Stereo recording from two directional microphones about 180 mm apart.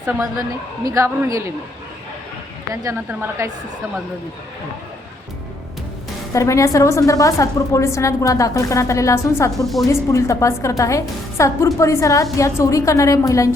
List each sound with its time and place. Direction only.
0.0 s a woman's voice: 15° right (ahead or behind)
2.8 s a woman's voice: 15° right (ahead or behind)
6.3 s a woman's voice: 15° left (ahead or behind)
9.6 s a woman's voice: centre (ahead or behind)
9.9 s a woman's voice: 15° left (ahead or behind)